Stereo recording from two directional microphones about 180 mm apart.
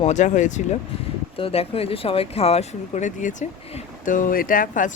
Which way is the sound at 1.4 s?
30° left (ahead or behind).